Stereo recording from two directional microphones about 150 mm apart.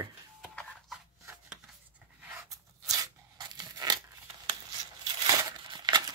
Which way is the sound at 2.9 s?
25° right (ahead or behind).